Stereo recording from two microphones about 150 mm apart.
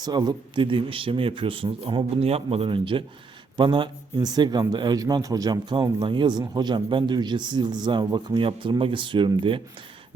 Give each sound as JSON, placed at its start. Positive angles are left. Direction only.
{"t": 0.0, "sound": "speech", "side_deg": -25}